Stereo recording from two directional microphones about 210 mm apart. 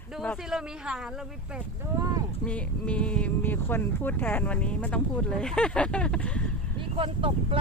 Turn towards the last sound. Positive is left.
turn(degrees=-25)  # may be behind; listen again after turning